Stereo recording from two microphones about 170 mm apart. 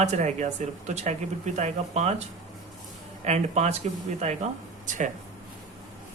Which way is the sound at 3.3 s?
40° right (ahead or behind).